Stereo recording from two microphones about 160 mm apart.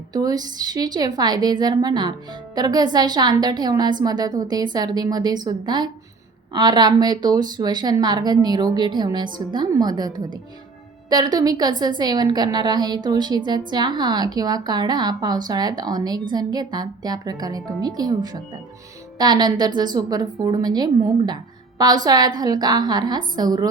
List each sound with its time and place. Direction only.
0.1 s speech: 25° right (ahead or behind)